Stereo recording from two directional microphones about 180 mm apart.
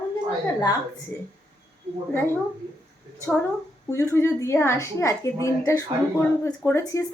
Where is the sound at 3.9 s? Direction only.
15° left (ahead or behind).